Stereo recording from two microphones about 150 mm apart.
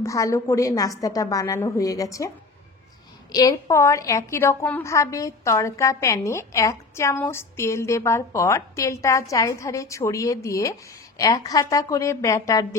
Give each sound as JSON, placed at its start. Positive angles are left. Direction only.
{"t": 0.0, "sound": "a woman's voice", "side_deg": 20}